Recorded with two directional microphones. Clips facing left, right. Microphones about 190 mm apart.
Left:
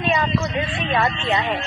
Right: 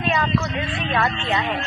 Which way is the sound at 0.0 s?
Centre (ahead or behind).